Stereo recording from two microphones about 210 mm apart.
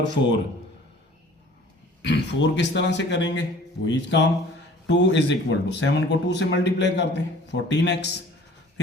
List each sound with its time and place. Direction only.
0.0 s speech: 55° left (ahead or behind)
2.0 s speech: 55° left (ahead or behind)